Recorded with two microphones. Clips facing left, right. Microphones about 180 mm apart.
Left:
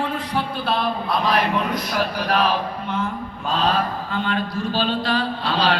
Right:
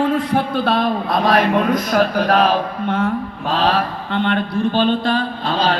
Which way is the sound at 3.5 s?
60° right (ahead or behind).